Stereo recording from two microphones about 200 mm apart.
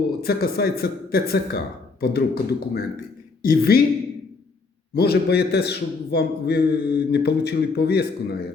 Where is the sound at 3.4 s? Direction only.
50° left (ahead or behind).